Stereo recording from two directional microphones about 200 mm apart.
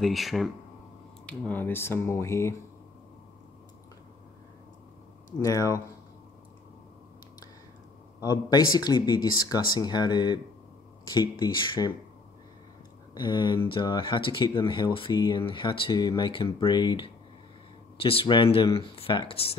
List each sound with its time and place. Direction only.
0.0 s speech: centre (ahead or behind)
5.4 s speech: 15° left (ahead or behind)
8.2 s speech: 20° left (ahead or behind)
13.1 s speech: 20° left (ahead or behind)